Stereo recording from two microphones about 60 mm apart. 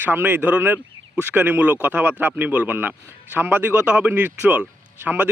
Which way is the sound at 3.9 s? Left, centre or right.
Right.